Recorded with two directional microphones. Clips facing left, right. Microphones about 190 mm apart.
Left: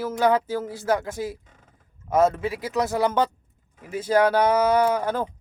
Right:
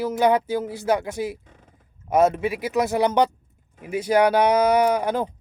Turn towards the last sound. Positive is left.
turn(degrees=-15)  # may be behind; listen again after turning